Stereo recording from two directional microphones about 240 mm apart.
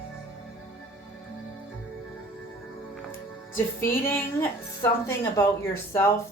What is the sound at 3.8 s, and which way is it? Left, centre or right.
A woman's voice, centre.